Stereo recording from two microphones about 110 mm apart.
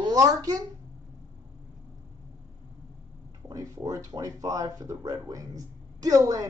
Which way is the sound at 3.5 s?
30° right (ahead or behind).